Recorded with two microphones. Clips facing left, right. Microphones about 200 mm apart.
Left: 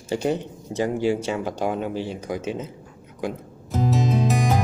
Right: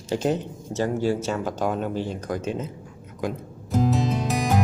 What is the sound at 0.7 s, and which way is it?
Speech, 15° left (ahead or behind).